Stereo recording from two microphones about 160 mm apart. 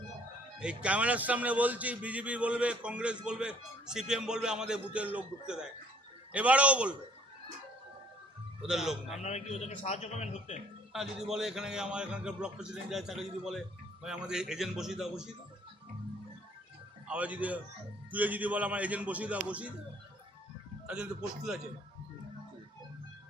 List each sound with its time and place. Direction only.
0.6 s a man's voice: 5° right (ahead or behind)
8.6 s a man's voice: centre (ahead or behind)
9.2 s a man's voice: 45° left (ahead or behind)
10.9 s a man's voice: centre (ahead or behind)
17.1 s a man's voice: 10° right (ahead or behind)
20.8 s a man's voice: 5° right (ahead or behind)